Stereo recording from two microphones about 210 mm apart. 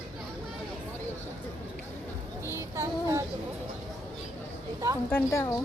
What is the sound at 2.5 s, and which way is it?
Child singing, 15° right (ahead or behind).